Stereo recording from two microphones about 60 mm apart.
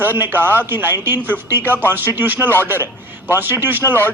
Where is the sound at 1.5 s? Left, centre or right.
Right.